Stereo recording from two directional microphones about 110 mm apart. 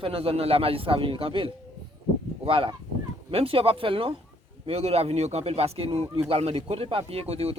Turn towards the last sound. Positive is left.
turn(degrees=-65)  # may be behind; listen again after turning